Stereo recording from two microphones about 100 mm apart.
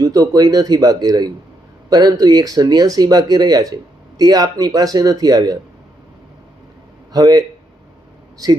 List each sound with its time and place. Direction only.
0.0 s speech: 40° right (ahead or behind)
7.1 s speech: 40° right (ahead or behind)